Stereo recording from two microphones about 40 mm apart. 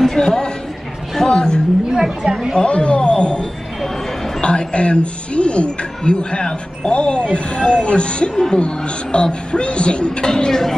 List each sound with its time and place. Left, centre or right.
0.1 s a sound: centre
1.9 s a woman's voice: centre
2.5 s a woman's voice: left; by 10.8 s centre